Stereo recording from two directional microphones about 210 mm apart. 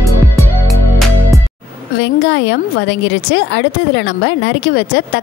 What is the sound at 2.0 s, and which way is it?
Speech, 55° left (ahead or behind).